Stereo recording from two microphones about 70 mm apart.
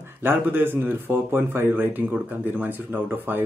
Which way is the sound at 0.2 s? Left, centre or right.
Right.